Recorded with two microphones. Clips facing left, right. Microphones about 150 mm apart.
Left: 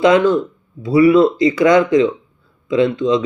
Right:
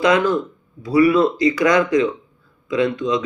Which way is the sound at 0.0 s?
25° left (ahead or behind).